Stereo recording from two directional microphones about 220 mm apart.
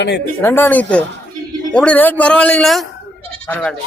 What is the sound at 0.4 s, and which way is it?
Speech, 10° left (ahead or behind).